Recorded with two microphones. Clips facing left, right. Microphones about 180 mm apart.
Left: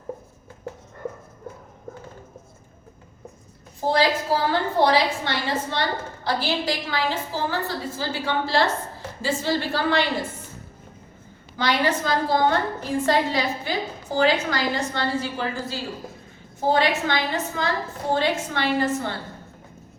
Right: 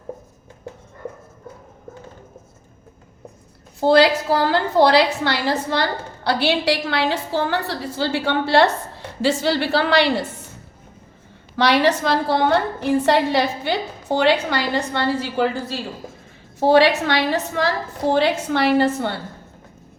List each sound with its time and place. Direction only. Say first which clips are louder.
3.8 s a woman's voice: right 7 dB; 75° right (ahead or behind)
11.5 s a woman's voice: right 6 dB; 75° right (ahead or behind)
16.6 s a woman's voice: right 7 dB; 75° right (ahead or behind)